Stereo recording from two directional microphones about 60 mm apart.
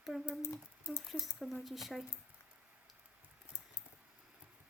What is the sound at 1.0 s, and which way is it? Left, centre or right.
Speech, centre.